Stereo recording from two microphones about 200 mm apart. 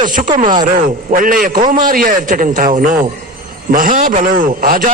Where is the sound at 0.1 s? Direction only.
40° right (ahead or behind).